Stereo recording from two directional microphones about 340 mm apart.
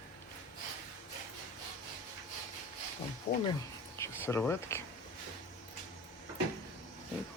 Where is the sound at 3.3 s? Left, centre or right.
Centre.